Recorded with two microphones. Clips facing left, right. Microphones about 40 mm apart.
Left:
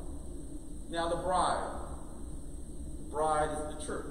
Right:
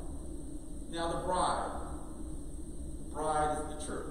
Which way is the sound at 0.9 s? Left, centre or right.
Centre.